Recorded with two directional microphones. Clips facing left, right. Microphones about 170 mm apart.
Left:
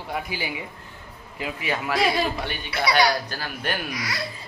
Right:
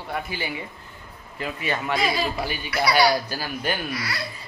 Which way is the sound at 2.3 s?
5° right (ahead or behind).